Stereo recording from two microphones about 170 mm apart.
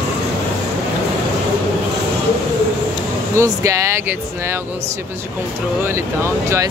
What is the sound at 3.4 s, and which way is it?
Speech, 15° right (ahead or behind).